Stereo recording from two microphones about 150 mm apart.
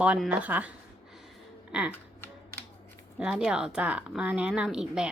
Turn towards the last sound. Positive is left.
turn(degrees=-5)  # may be behind; listen again after turning